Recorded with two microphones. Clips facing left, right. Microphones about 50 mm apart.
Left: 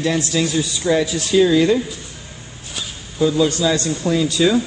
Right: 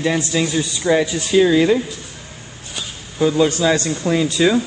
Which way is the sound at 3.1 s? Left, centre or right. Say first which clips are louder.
Right 1 dB; right.